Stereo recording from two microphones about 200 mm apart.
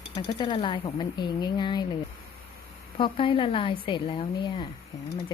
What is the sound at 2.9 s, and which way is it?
Speech, 25° left (ahead or behind).